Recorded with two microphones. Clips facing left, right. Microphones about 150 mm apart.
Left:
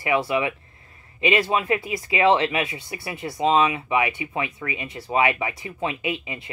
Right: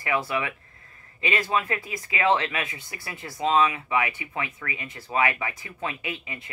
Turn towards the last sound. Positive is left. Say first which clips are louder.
# left 6 dB
turn(degrees=25)  # may be behind; listen again after turning